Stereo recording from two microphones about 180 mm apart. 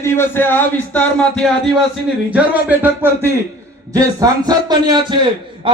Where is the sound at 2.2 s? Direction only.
10° right (ahead or behind); by 5.7 s 25° right (ahead or behind).